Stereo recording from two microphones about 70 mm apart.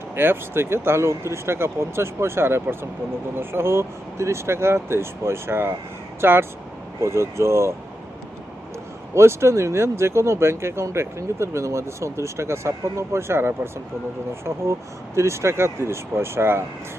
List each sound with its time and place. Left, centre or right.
0.2 s speech: right
9.1 s speech: right